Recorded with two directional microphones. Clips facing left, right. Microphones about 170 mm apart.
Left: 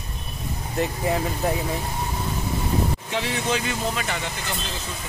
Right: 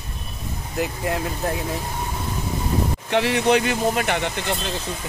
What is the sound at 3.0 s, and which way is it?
Speech, 65° right (ahead or behind).